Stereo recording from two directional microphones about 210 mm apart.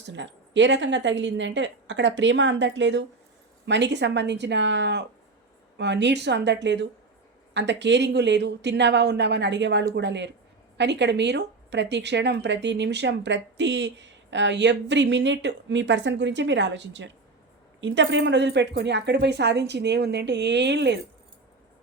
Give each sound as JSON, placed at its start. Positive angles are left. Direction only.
{"t": 0.1, "sound": "a woman's voice", "side_deg": -60}